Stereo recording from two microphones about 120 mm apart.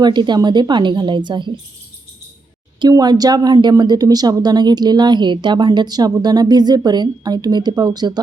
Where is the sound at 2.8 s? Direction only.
35° right (ahead or behind).